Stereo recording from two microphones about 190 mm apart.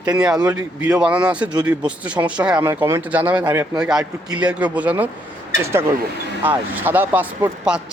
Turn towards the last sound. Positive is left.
turn(degrees=-10)  # may be behind; listen again after turning